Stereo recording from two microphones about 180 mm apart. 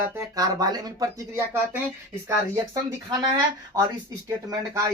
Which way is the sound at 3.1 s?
20° right (ahead or behind).